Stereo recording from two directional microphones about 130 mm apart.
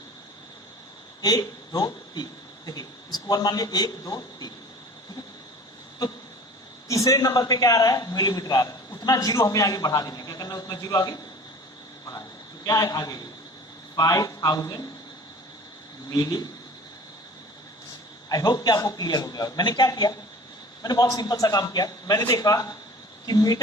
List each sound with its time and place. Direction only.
1.2 s a man's voice: 30° left (ahead or behind)
6.8 s a man's voice: 25° left (ahead or behind)
12.6 s a man's voice: 30° left (ahead or behind)
16.0 s a man's voice: 30° left (ahead or behind)
18.3 s a man's voice: 30° left (ahead or behind)